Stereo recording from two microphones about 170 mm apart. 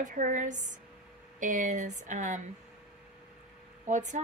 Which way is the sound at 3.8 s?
45° right (ahead or behind).